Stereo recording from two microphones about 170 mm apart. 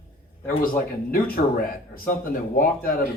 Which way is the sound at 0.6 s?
60° left (ahead or behind).